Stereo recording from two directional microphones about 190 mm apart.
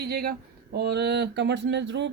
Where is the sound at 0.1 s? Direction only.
55° right (ahead or behind).